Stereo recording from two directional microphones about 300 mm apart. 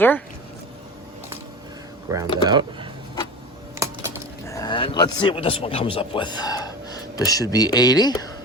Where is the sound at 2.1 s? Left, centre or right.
Centre.